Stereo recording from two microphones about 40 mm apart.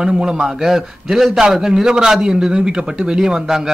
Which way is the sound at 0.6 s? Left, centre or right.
Centre.